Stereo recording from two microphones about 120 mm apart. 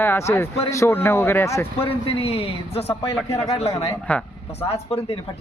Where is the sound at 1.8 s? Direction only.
50° left (ahead or behind).